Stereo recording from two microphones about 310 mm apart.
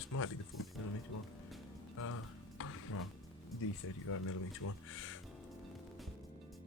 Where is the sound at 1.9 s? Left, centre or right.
Left.